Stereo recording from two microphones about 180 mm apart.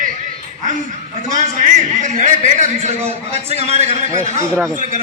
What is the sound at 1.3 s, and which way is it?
A man's voice, 40° right (ahead or behind).